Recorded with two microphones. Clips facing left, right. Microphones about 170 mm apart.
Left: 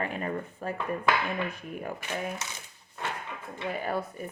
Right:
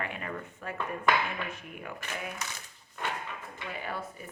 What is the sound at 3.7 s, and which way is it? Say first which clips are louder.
Speech: left 7 dB; 45° left (ahead or behind).